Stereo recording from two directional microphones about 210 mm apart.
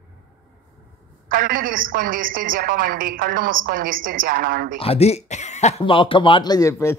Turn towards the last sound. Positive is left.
turn(degrees=15)  # may be behind; listen again after turning